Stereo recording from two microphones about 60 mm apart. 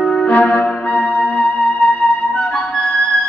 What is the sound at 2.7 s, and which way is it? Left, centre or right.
Music, centre.